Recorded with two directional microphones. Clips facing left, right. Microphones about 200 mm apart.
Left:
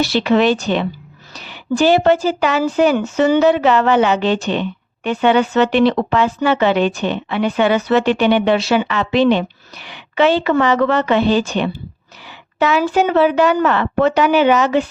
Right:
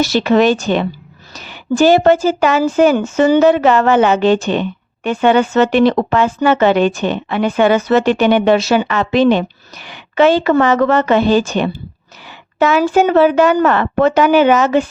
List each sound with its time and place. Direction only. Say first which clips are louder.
0.0 s a woman's voice: right 2 dB; 45° right (ahead or behind)